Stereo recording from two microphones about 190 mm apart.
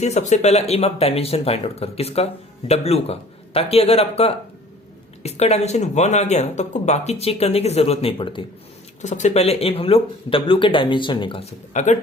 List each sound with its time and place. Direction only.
0.0 s speech: 35° left (ahead or behind)
9.0 s speech: 40° left (ahead or behind)
11.7 s speech: 40° left (ahead or behind)